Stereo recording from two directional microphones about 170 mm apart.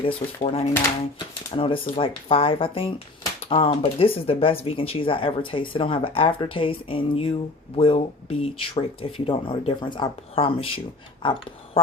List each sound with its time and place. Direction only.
0.4 s speech: 35° left (ahead or behind)